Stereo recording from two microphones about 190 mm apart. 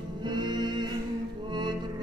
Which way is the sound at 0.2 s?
25° right (ahead or behind).